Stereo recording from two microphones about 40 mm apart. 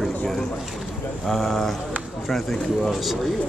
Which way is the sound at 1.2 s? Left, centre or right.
Centre.